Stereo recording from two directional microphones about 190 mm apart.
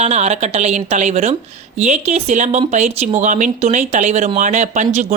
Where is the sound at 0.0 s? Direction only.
35° right (ahead or behind).